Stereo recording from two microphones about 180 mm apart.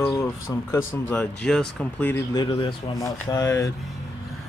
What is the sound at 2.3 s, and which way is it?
Speech, 25° left (ahead or behind).